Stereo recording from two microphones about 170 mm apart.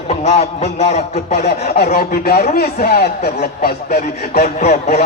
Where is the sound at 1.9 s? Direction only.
65° left (ahead or behind).